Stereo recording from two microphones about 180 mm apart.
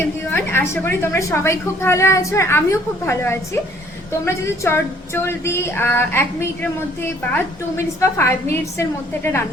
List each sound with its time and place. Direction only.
0.0 s a woman's voice: 15° left (ahead or behind)